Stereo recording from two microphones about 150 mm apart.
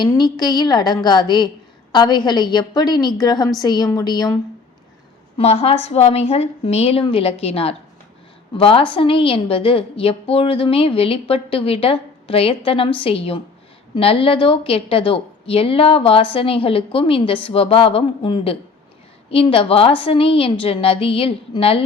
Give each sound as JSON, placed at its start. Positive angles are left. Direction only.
{"t": 0.0, "sound": "a woman's voice", "side_deg": 30}
{"t": 5.4, "sound": "a woman's voice", "side_deg": 45}